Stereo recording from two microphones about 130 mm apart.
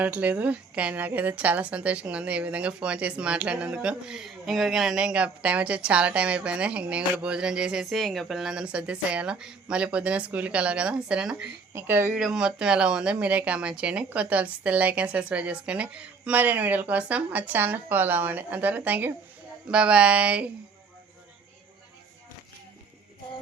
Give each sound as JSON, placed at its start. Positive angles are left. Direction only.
{"t": 0.0, "sound": "a woman's voice", "side_deg": -10}
{"t": 11.7, "sound": "speech", "side_deg": -20}
{"t": 12.1, "sound": "a woman's voice", "side_deg": -5}